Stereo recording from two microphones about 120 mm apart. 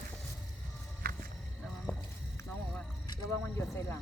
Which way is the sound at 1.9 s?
30° left (ahead or behind).